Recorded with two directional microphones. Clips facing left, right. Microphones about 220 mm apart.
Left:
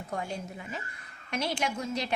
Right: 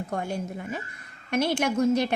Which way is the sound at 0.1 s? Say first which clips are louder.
Right 2 dB; 55° right (ahead or behind).